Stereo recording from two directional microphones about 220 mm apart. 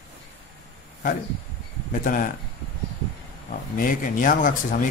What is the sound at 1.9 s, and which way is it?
Speech, 40° left (ahead or behind).